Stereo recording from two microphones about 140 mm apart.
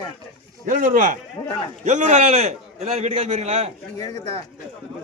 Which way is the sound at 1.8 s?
55° right (ahead or behind).